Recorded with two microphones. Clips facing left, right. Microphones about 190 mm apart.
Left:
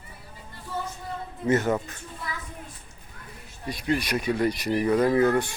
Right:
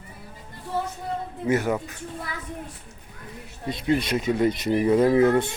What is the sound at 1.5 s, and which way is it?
Speech, 10° right (ahead or behind).